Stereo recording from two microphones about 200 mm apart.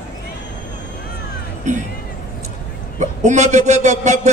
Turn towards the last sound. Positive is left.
turn(degrees=-35)  # may be behind; listen again after turning